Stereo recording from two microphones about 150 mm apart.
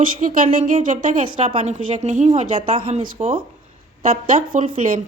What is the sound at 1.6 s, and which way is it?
Speech, 50° right (ahead or behind).